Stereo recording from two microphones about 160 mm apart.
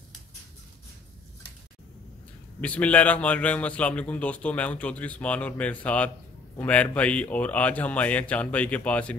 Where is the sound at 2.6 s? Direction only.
10° left (ahead or behind).